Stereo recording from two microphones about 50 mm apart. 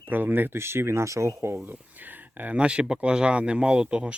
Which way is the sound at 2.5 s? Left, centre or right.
Right.